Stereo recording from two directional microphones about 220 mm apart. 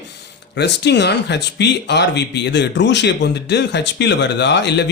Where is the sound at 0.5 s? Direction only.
50° left (ahead or behind).